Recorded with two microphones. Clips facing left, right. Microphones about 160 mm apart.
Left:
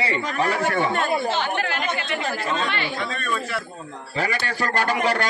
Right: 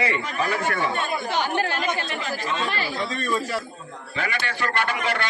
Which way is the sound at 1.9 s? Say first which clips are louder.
Left 2 dB; 35° right (ahead or behind).